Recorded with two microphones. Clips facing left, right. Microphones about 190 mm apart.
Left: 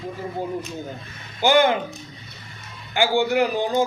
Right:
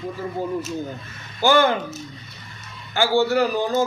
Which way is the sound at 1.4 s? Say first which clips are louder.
Even; 20° left (ahead or behind).